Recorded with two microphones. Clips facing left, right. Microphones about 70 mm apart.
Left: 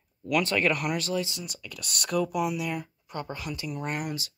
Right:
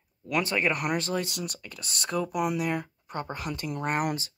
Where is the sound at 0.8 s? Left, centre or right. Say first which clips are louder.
Even; right.